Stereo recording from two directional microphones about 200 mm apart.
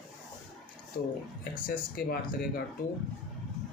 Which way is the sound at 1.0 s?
50° left (ahead or behind).